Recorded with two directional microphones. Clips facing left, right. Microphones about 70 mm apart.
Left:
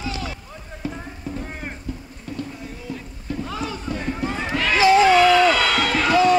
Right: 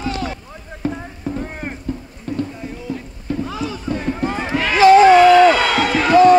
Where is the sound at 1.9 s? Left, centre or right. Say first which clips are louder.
Right 8 dB; right.